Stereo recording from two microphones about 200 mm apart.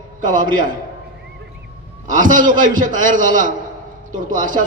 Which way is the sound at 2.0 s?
40° right (ahead or behind).